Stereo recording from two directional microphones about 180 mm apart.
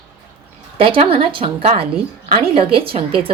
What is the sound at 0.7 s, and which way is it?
Speech, 30° right (ahead or behind).